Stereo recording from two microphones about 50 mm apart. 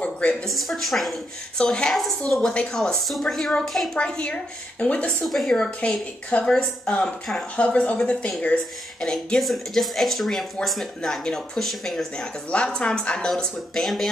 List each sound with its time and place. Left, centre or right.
0.0 s a sound: left
0.5 s speech: centre
1.6 s speech: centre
1.9 s speech: centre
2.5 s a woman's voice: left
3.1 s speech: centre
3.9 s a woman's voice: centre
5.2 s speech: centre
5.8 s a woman's voice: left
7.5 s a woman's voice: left
9.4 s speech: centre
12.4 s a woman's voice: centre
13.4 s speech: centre